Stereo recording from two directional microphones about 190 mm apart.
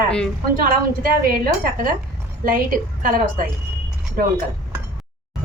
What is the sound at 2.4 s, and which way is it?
A woman's voice, 45° right (ahead or behind).